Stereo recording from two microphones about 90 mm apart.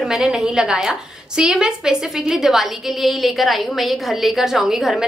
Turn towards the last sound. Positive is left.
turn(degrees=0)  # may be behind; listen again after turning